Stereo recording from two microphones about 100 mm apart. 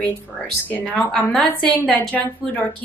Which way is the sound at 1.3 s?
10° left (ahead or behind).